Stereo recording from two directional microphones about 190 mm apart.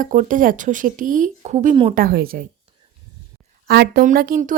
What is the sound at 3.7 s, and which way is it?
Speech, 55° right (ahead or behind).